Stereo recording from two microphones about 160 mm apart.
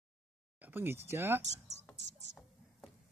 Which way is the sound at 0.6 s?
10° right (ahead or behind).